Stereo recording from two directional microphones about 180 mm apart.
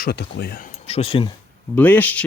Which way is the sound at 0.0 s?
65° left (ahead or behind).